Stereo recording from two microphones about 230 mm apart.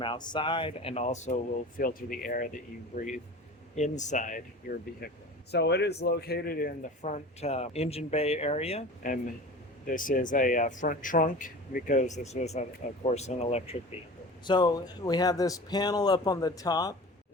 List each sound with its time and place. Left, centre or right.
0.0 s speech: centre
4.9 s a man's voice: left; by 16.9 s centre